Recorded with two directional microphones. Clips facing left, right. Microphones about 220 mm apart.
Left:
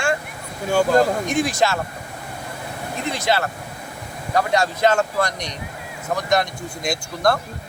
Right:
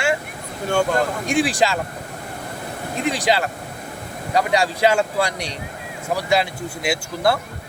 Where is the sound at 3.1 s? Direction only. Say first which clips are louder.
Left 2 dB; 15° right (ahead or behind).